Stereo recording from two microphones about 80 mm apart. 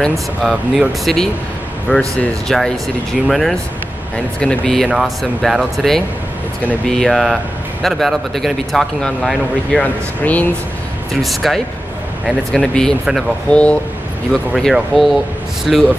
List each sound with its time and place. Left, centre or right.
0.0 s speech: centre
0.5 s speech: centre
1.9 s speech: centre
4.8 s speech: centre
9.7 s speech: centre
11.2 s speech: centre
14.3 s speech: centre